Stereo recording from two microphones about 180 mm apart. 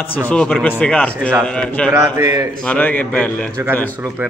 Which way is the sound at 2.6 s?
10° left (ahead or behind).